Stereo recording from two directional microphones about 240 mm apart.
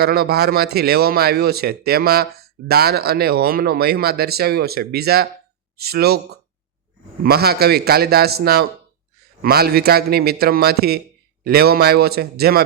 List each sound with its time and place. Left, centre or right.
0.0 s a man's voice: right